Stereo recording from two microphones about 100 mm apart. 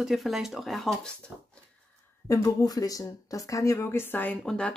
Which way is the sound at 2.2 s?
35° left (ahead or behind).